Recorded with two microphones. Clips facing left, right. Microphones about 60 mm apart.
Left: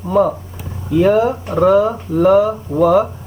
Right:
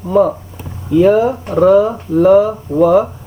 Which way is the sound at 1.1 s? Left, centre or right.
Centre.